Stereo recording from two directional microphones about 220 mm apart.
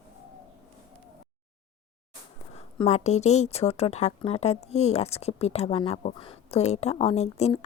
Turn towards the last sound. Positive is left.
turn(degrees=30)  # may be behind; listen again after turning